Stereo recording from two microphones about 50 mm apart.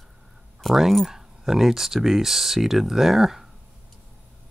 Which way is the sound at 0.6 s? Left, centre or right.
Centre.